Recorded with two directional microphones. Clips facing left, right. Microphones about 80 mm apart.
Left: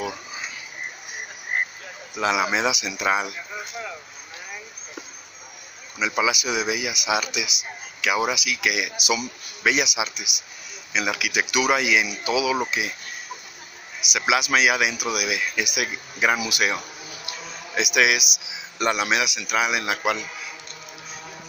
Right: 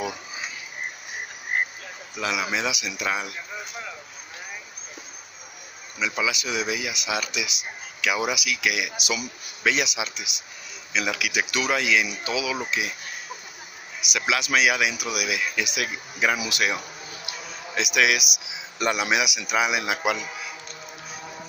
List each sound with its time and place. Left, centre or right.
2.1 s speech: left
5.9 s speech: left
14.1 s speech: centre
19.0 s a man's voice: centre